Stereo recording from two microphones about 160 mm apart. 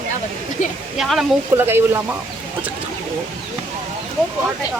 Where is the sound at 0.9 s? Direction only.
Centre (ahead or behind).